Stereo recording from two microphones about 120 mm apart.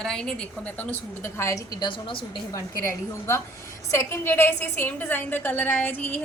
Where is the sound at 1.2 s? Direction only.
25° left (ahead or behind); by 2.4 s 45° left (ahead or behind).